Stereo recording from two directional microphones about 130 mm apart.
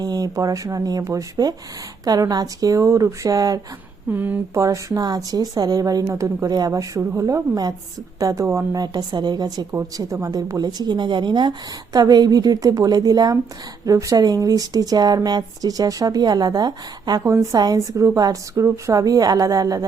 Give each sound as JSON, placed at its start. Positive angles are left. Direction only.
{"t": 0.0, "sound": "speech", "side_deg": -30}
{"t": 4.1, "sound": "speech", "side_deg": -15}